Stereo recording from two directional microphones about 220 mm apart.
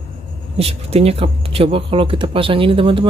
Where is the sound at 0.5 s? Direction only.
25° right (ahead or behind).